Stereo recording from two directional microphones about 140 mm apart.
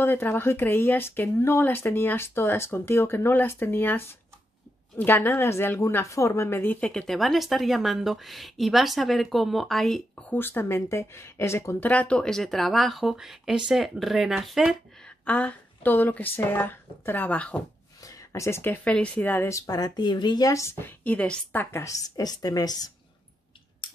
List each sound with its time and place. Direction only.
0.0 s a woman's voice: 15° left (ahead or behind)
10.3 s speech: 15° left (ahead or behind); by 15.1 s centre (ahead or behind)
15.2 s speech: 10° left (ahead or behind)
18.0 s speech: 25° left (ahead or behind)
19.6 s a woman's voice: 30° left (ahead or behind)